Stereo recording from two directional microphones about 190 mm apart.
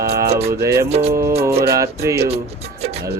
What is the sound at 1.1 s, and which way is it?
Music, 15° right (ahead or behind).